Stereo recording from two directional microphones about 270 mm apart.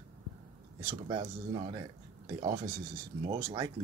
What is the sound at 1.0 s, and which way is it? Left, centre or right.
Speech, centre.